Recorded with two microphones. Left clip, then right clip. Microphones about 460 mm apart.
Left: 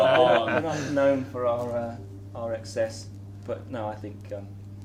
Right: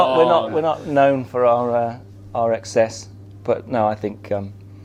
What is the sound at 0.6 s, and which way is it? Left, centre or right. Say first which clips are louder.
Speech: right 8 dB; right.